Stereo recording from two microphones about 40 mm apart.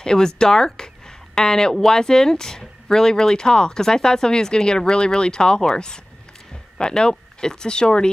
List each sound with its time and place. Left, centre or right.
0.0 s speech: centre
6.8 s speech: centre